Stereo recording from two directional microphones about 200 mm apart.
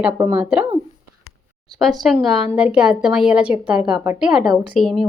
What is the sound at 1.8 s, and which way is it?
A woman's voice, centre (ahead or behind).